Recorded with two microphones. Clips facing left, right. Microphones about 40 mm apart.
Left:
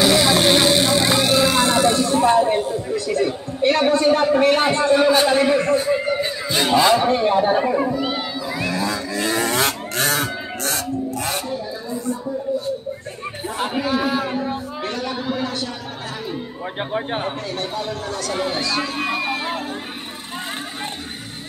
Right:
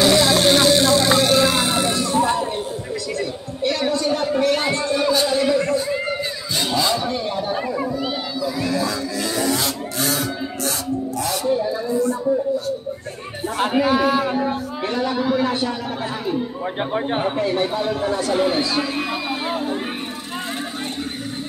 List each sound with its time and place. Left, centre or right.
0.0 s vehicle: centre
1.0 s vehicle: centre
1.9 s emergency vehicle: left
2.3 s a sound: left
13.6 s speech: centre
14.3 s a sound: centre
15.0 s speech: centre
15.4 s speech: right
16.6 s speech: centre
17.4 s speech: centre
18.8 s speech: centre